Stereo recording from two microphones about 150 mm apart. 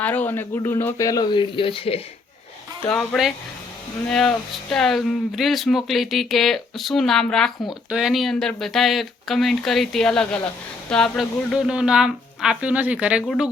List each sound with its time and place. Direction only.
0.0 s speech: 10° left (ahead or behind); by 2.0 s 40° left (ahead or behind)
2.8 s speech: 5° left (ahead or behind)